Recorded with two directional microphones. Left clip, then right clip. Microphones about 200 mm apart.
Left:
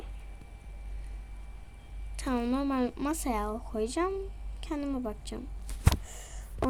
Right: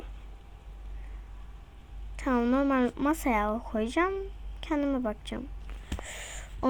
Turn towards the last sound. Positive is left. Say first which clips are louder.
# right 8 dB
turn(degrees=-25)  # may be behind; listen again after turning